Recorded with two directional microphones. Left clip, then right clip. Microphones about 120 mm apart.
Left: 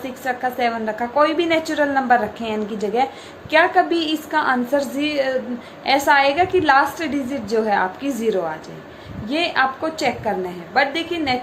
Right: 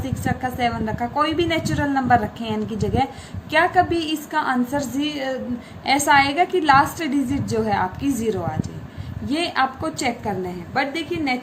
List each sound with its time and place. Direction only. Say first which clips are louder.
0.3 s a woman's voice: left 3 dB; 30° right (ahead or behind)
5.8 s a woman's voice: left 1 dB; 40° right (ahead or behind)